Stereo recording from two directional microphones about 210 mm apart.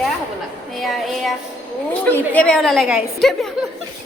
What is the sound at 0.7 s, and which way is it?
A woman's voice, centre (ahead or behind).